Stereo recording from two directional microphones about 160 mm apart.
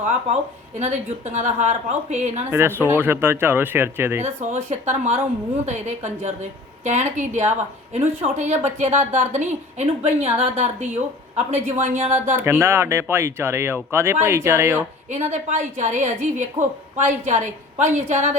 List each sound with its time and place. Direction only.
0.8 s a woman's voice: 45° right (ahead or behind)
2.5 s speech: 15° right (ahead or behind)
4.4 s a woman's voice: 45° right (ahead or behind)
12.4 s speech: 15° right (ahead or behind)
15.1 s a woman's voice: 50° right (ahead or behind)